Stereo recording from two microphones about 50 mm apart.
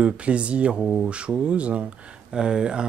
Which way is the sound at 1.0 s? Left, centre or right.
Right.